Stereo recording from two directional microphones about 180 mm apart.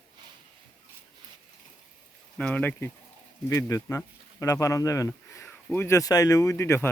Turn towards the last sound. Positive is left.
turn(degrees=15)  # may be behind; listen again after turning